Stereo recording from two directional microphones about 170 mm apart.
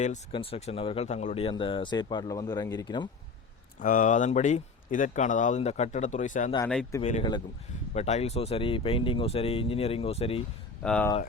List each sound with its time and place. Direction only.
0.3 s speech: 35° left (ahead or behind)
3.8 s speech: 50° left (ahead or behind); by 10.4 s 35° left (ahead or behind)
10.8 s speech: 5° left (ahead or behind)